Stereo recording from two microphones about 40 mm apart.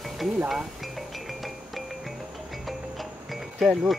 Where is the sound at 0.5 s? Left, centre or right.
Centre.